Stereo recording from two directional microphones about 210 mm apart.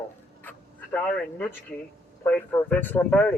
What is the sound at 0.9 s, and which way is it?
A man's voice, 5° left (ahead or behind).